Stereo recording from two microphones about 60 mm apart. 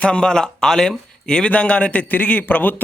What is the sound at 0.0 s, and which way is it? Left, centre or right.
Speech, centre.